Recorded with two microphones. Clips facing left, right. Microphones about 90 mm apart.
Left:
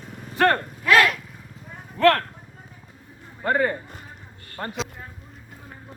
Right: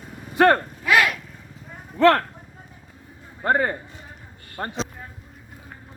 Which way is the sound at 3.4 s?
30° right (ahead or behind).